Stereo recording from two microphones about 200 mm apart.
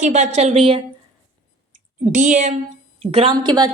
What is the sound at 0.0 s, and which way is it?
Speech, 35° right (ahead or behind).